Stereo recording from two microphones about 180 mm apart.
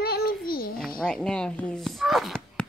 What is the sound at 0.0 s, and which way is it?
Child singing, 60° left (ahead or behind).